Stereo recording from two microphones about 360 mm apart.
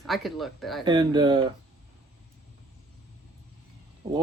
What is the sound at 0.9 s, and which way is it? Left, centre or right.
Speech, centre.